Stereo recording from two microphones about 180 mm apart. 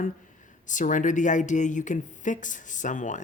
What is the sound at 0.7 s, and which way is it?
Speech, 45° left (ahead or behind).